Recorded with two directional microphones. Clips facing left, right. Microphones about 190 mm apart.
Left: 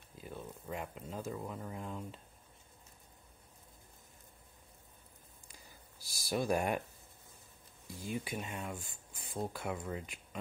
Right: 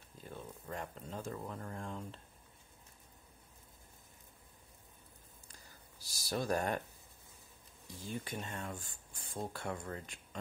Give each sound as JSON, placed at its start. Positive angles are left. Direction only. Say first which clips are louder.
{"t": 0.2, "sound": "speech", "louder": "left 2 dB", "side_deg": 10}
{"t": 5.5, "sound": "a sound", "louder": "left 2 dB", "side_deg": 10}
{"t": 6.2, "sound": "speech", "louder": "left 2 dB", "side_deg": 10}
{"t": 7.9, "sound": "speech", "louder": "left 3 dB", "side_deg": 10}